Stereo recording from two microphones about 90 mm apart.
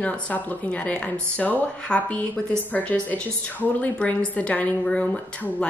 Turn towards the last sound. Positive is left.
turn(degrees=10)  # may be behind; listen again after turning